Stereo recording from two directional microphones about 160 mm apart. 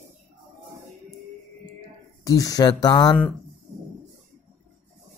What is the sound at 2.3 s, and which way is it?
Speech, 20° left (ahead or behind).